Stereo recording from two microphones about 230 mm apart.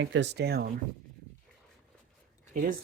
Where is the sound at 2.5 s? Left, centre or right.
Right.